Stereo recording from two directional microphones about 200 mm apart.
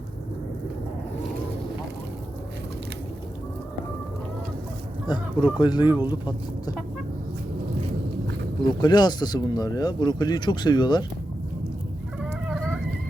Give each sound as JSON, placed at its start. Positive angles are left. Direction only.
{"t": 5.0, "sound": "speech", "side_deg": 25}
{"t": 8.8, "sound": "speech", "side_deg": 20}
{"t": 12.5, "sound": "fowl", "side_deg": 0}